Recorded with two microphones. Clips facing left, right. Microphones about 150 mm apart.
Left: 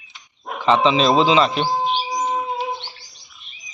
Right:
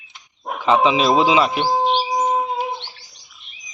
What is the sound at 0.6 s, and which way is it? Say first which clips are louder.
Speech: even; 10° right (ahead or behind).